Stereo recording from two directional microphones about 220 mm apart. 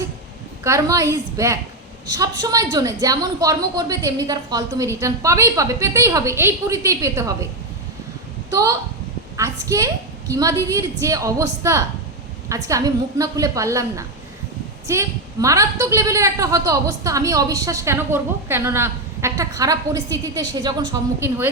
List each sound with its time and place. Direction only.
0.6 s a woman's voice: 15° right (ahead or behind)
8.4 s a woman's voice: 15° right (ahead or behind)